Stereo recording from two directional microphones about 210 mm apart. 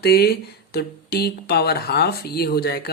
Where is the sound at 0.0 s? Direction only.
50° left (ahead or behind).